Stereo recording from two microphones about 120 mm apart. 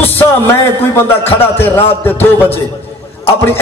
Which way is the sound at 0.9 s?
20° left (ahead or behind).